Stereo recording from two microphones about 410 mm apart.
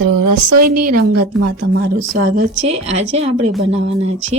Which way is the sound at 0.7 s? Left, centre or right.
Right.